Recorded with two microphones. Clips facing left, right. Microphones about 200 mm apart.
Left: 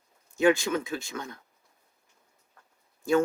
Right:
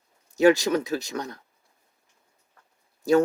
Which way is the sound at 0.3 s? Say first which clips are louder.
Right 4 dB; 40° right (ahead or behind).